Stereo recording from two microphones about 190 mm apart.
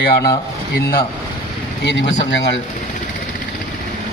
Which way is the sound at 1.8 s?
70° left (ahead or behind).